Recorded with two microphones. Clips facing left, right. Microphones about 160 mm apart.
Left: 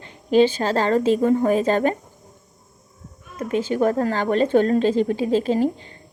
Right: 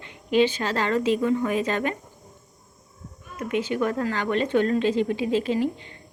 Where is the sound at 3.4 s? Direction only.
35° left (ahead or behind).